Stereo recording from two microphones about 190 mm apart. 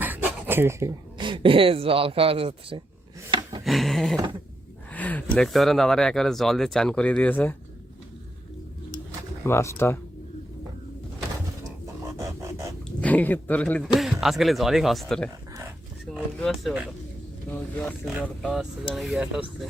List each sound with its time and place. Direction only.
0.0 s speech: 10° right (ahead or behind); by 2.8 s 30° right (ahead or behind)
3.6 s a sound: centre (ahead or behind)
4.9 s speech: 10° left (ahead or behind)
9.4 s speech: 15° left (ahead or behind)
12.1 s music: 15° right (ahead or behind)
13.0 s speech: 10° left (ahead or behind)
17.5 s speech: 10° left (ahead or behind)
18.1 s speech: 5° right (ahead or behind)